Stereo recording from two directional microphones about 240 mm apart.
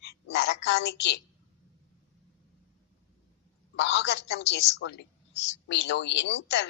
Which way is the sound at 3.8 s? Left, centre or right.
Left.